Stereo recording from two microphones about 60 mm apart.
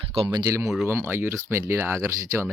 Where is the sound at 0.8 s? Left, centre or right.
Right.